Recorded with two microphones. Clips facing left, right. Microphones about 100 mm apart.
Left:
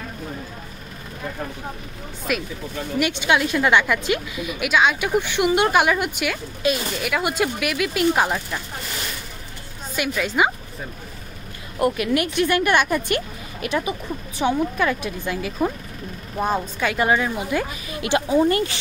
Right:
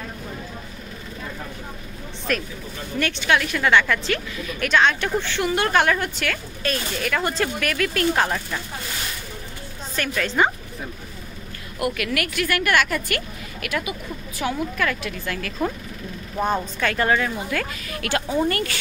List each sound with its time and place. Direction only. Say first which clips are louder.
2.3 s a woman's voice: left 1 dB; 10° left (ahead or behind)
9.9 s a woman's voice: left 1 dB; 10° left (ahead or behind)
11.8 s a woman's voice: left 4 dB; 25° left (ahead or behind)